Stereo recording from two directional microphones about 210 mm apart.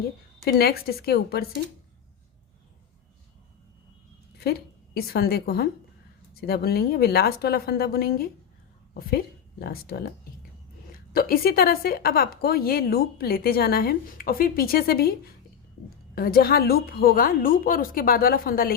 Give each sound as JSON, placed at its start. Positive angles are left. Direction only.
{"t": 0.4, "sound": "a woman's voice", "side_deg": 45}
{"t": 4.9, "sound": "a woman's voice", "side_deg": 45}
{"t": 16.1, "sound": "a woman's voice", "side_deg": 45}